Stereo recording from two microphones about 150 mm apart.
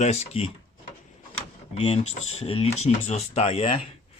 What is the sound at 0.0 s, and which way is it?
Speech, 45° left (ahead or behind).